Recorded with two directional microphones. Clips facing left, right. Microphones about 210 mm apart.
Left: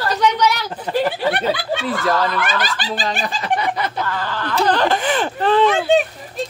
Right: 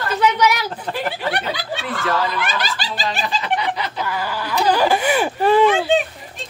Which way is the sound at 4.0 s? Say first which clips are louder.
Left 1 dB; 10° right (ahead or behind).